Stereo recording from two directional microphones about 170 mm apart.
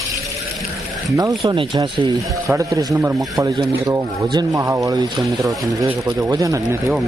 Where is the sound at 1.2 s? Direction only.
25° right (ahead or behind).